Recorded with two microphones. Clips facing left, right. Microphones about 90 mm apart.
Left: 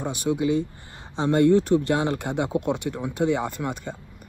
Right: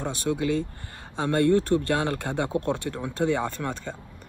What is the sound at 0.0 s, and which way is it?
Speech, 15° left (ahead or behind).